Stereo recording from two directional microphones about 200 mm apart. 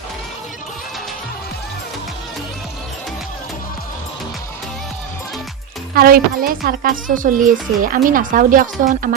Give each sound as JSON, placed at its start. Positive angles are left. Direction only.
{"t": 5.9, "sound": "a woman's voice", "side_deg": -50}